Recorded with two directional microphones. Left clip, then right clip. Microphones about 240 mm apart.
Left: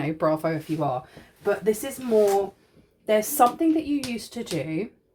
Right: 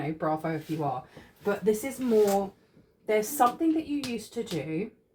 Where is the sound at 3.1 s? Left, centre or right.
Left.